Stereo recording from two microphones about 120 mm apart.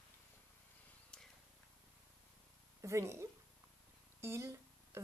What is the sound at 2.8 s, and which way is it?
Speech, 25° right (ahead or behind).